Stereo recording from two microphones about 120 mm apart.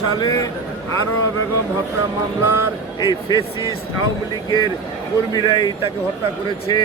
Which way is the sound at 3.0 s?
35° left (ahead or behind).